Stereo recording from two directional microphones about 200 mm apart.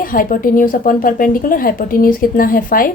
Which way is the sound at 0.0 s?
45° left (ahead or behind).